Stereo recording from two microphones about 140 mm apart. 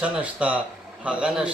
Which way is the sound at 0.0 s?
10° right (ahead or behind).